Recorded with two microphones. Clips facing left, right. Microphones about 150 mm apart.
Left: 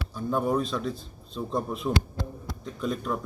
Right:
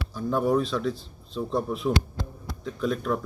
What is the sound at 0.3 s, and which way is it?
Speech, centre (ahead or behind).